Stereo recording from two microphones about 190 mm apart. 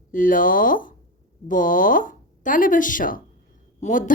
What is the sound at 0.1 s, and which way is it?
A woman's voice, 45° left (ahead or behind).